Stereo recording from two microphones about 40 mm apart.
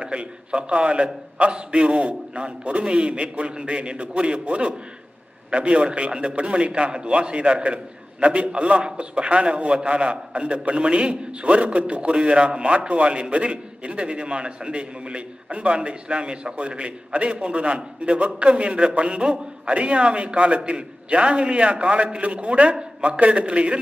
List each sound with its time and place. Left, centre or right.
0.0 s a man's voice: right
1.8 s a man's voice: right